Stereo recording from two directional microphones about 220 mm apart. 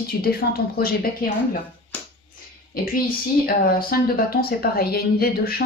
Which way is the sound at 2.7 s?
40° left (ahead or behind).